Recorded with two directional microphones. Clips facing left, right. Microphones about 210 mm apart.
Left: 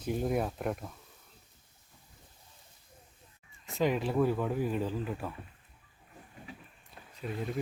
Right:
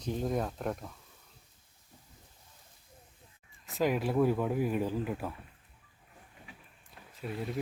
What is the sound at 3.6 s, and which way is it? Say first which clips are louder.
Speech: even; centre (ahead or behind).